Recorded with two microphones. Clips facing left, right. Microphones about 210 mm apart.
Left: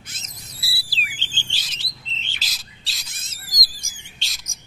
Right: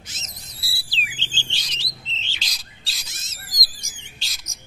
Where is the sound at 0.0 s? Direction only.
55° left (ahead or behind).